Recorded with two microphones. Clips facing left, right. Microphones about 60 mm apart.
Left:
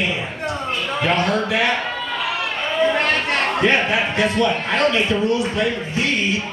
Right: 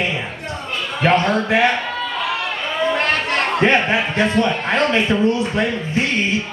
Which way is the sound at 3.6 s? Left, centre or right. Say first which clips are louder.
Right 2 dB; right.